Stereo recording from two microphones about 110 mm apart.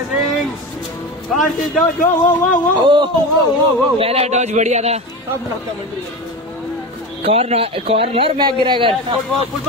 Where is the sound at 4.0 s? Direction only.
65° right (ahead or behind); by 5.0 s 85° right.